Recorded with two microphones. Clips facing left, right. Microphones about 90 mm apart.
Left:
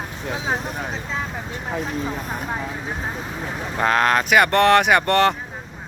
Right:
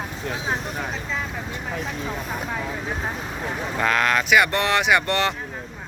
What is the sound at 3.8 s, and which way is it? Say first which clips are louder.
Speech: left 3 dB; 35° left (ahead or behind).